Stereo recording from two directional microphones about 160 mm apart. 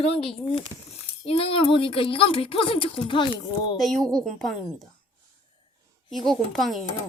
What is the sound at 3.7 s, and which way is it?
A woman's voice, centre (ahead or behind).